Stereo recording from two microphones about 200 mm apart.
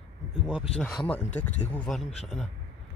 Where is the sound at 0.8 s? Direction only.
5° left (ahead or behind).